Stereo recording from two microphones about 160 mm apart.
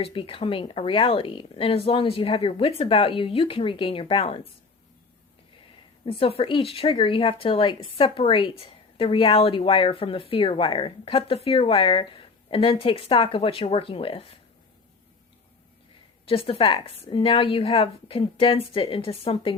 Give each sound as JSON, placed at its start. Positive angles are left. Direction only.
{"t": 0.0, "sound": "speech", "side_deg": 35}
{"t": 6.1, "sound": "speech", "side_deg": 35}
{"t": 16.2, "sound": "speech", "side_deg": 35}